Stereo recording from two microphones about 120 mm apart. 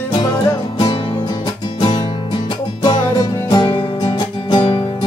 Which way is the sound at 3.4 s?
35° left (ahead or behind).